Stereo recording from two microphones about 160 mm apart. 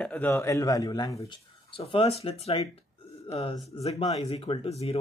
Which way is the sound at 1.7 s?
35° left (ahead or behind).